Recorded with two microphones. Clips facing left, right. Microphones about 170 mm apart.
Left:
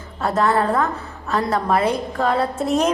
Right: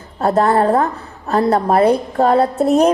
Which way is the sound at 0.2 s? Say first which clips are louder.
Right 5 dB; 35° right (ahead or behind).